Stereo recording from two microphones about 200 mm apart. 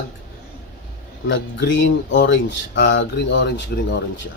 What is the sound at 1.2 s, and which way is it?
Speech, 70° left (ahead or behind).